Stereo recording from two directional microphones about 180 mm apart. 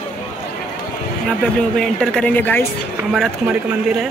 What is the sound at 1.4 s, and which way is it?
Speech, 5° left (ahead or behind).